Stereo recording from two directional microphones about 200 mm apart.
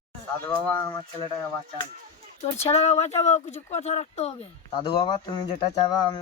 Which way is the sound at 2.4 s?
30° left (ahead or behind).